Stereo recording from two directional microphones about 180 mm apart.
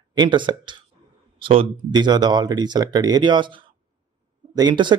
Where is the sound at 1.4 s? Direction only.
30° right (ahead or behind).